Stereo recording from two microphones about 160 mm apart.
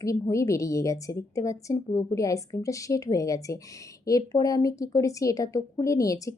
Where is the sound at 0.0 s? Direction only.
20° left (ahead or behind).